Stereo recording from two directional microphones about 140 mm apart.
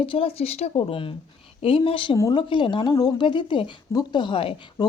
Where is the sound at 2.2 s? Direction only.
25° left (ahead or behind).